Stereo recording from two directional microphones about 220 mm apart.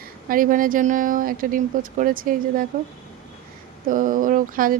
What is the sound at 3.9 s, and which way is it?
Speech, 40° right (ahead or behind).